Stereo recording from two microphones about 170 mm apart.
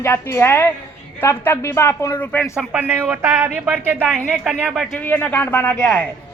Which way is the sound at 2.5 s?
10° right (ahead or behind).